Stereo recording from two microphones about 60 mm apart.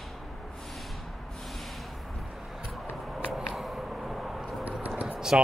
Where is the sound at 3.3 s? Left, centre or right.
Centre.